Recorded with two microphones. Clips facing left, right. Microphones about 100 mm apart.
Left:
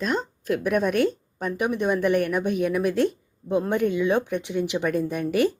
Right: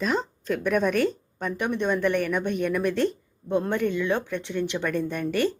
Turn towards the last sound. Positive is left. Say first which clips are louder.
# left 3 dB
turn(degrees=10)  # may be behind; listen again after turning